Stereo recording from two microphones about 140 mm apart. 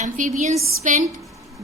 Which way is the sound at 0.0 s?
65° right (ahead or behind).